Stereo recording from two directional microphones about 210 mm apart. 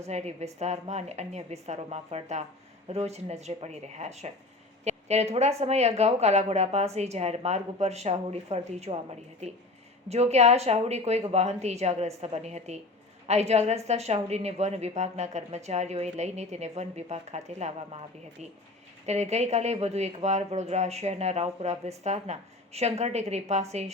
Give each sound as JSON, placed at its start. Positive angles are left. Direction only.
{"t": 0.0, "sound": "speech", "side_deg": -30}
{"t": 19.0, "sound": "speech", "side_deg": -30}